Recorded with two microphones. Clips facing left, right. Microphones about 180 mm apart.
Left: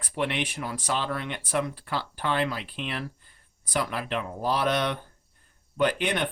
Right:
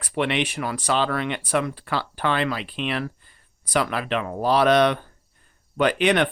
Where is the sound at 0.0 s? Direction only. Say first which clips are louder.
Right 5 dB; 85° right.